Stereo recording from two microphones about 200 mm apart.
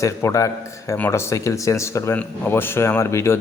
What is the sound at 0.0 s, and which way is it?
Speech, 15° left (ahead or behind).